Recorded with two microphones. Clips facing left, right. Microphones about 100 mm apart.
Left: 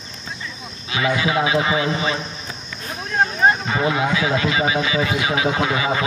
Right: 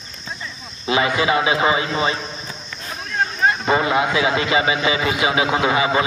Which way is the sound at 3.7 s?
50° right (ahead or behind).